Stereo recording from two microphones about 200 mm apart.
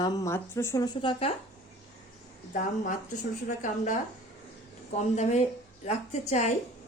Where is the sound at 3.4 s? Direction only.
40° left (ahead or behind).